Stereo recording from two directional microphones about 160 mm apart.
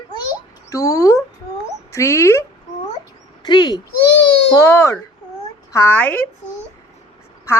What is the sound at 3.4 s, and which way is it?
A woman's voice, 25° left (ahead or behind).